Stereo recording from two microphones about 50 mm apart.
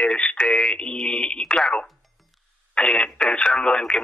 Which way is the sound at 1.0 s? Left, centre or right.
Centre.